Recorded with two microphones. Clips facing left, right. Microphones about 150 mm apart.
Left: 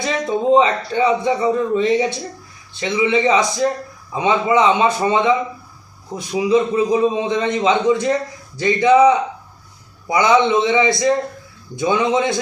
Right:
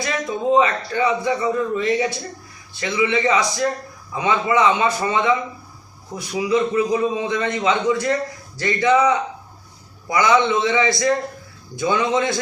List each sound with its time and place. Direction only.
0.0 s a man's voice: 25° left (ahead or behind)